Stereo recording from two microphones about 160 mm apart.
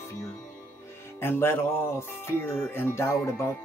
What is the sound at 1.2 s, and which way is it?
Speech, 15° left (ahead or behind).